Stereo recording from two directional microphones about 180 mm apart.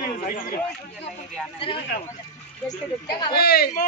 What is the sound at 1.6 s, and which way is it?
Speech, 30° left (ahead or behind).